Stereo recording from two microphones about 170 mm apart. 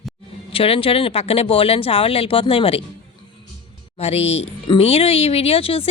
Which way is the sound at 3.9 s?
35° left (ahead or behind).